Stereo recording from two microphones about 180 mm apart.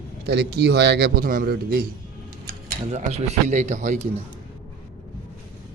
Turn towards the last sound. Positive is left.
turn(degrees=-40)  # may be behind; listen again after turning